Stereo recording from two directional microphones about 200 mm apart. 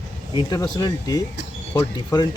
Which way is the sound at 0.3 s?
20° left (ahead or behind).